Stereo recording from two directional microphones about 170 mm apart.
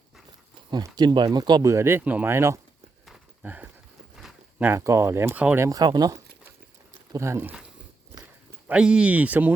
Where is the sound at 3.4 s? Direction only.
10° right (ahead or behind).